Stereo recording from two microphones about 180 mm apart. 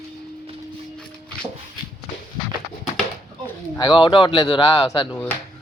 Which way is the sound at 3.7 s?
25° left (ahead or behind).